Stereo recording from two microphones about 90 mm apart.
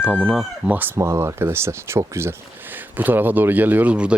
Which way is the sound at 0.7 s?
20° right (ahead or behind).